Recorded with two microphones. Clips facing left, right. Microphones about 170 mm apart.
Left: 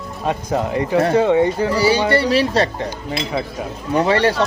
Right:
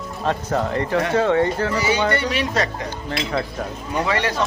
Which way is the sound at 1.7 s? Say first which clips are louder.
Left 5 dB; 30° left (ahead or behind).